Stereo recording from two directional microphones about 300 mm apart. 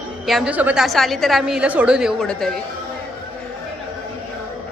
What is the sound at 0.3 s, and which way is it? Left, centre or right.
A woman's voice, centre.